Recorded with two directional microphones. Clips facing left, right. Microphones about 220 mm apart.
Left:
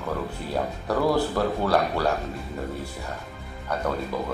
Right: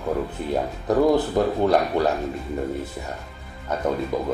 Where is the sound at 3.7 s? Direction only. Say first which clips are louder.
Right 4 dB; 20° right (ahead or behind).